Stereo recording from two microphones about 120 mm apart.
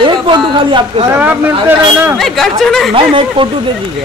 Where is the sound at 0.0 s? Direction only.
45° right (ahead or behind).